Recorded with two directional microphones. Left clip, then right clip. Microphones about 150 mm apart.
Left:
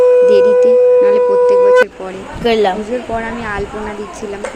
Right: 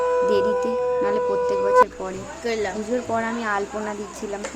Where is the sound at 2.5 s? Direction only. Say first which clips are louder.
Left 13 dB; 5° left (ahead or behind).